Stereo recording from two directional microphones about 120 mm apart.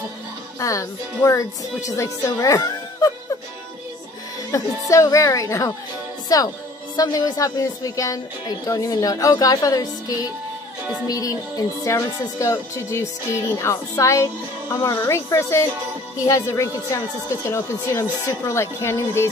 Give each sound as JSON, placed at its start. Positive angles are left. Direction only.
{"t": 0.6, "sound": "music", "side_deg": 25}
{"t": 1.9, "sound": "speech", "side_deg": 25}
{"t": 4.5, "sound": "music", "side_deg": 30}
{"t": 6.2, "sound": "speech", "side_deg": 30}
{"t": 11.1, "sound": "music", "side_deg": 30}